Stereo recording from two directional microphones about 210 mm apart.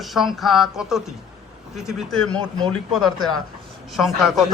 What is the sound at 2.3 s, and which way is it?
Speech, 20° right (ahead or behind).